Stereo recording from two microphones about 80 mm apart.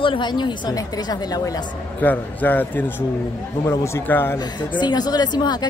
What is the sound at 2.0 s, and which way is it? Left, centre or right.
Speech, left.